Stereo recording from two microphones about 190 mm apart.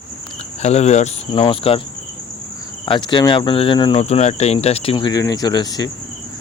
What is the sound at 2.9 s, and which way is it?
Speech, 25° left (ahead or behind).